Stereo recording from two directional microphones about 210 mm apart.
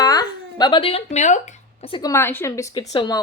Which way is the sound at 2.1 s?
10° left (ahead or behind).